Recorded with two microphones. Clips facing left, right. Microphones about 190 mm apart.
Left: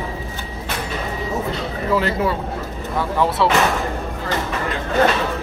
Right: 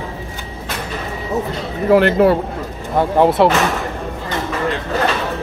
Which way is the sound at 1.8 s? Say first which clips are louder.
Right 8 dB; 65° right (ahead or behind).